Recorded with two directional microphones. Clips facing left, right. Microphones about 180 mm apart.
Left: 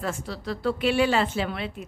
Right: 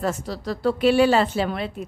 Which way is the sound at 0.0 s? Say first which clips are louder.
Right 5 dB; 40° right (ahead or behind).